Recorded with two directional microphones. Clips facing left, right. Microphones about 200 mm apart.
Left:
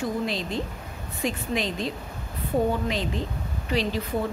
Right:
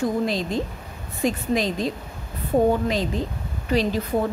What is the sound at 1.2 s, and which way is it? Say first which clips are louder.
Speech: right 5 dB; 40° right (ahead or behind).